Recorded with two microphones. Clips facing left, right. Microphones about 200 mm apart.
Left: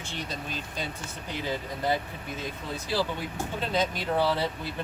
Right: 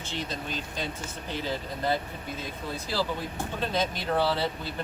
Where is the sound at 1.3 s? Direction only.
15° left (ahead or behind).